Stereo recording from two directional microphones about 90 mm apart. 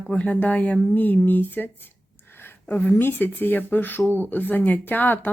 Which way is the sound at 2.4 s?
20° left (ahead or behind).